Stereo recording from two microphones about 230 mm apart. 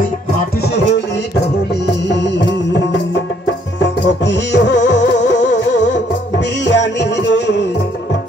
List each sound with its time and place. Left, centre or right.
0.6 s music: left
3.8 s music: left